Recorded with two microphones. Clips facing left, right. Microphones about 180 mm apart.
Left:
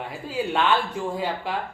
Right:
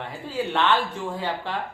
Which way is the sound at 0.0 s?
10° left (ahead or behind).